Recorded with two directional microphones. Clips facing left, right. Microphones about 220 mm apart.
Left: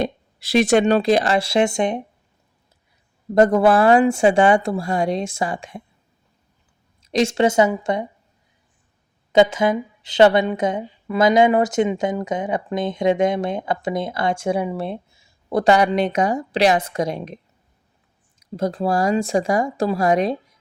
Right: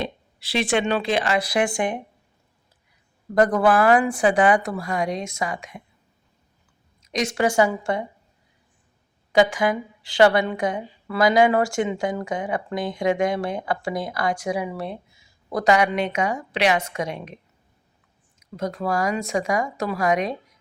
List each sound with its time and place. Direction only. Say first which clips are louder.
0.0 s speech: left 6 dB; 45° left (ahead or behind); by 2.0 s 20° left (ahead or behind)
3.3 s a woman's voice: left 4 dB; 25° left (ahead or behind)
7.0 s a woman's voice: left 5 dB; 30° left (ahead or behind)
9.3 s a woman's voice: left 3 dB; 20° left (ahead or behind)